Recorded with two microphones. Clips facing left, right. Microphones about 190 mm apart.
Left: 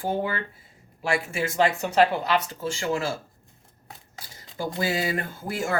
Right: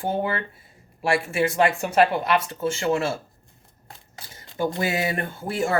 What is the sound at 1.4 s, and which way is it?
Speech, 25° right (ahead or behind).